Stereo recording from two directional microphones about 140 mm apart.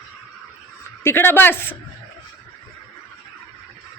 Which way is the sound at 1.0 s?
15° left (ahead or behind).